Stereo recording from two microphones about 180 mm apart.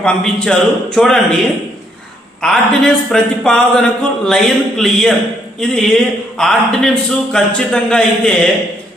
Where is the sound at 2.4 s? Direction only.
5° left (ahead or behind).